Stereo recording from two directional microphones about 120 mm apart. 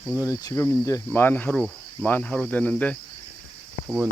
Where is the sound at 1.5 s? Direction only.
Centre (ahead or behind).